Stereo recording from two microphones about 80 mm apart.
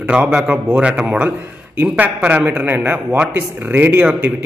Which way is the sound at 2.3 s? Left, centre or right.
Right.